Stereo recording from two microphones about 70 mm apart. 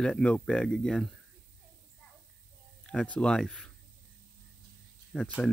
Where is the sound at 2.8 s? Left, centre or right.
Centre.